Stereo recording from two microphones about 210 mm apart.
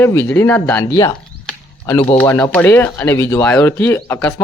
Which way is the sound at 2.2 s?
10° left (ahead or behind).